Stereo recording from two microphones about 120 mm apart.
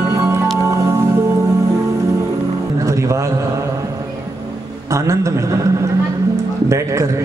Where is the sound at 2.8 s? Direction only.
25° right (ahead or behind).